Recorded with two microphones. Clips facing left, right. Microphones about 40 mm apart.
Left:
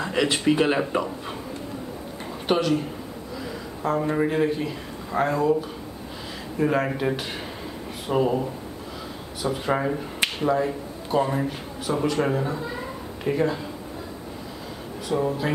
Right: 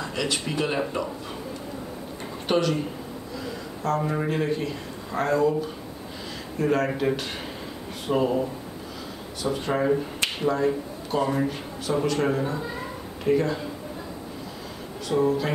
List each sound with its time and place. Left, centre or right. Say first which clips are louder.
0.0 s speech: left 6 dB; left
2.4 s speech: left 1 dB; centre
3.8 s a man's voice: left 2 dB; centre
6.6 s a man's voice: even; centre
9.4 s a man's voice: left 1 dB; centre
10.2 s finger snapping: left 3 dB; centre
11.3 s a man's voice: right 1 dB; centre
15.0 s a man's voice: right 2 dB; centre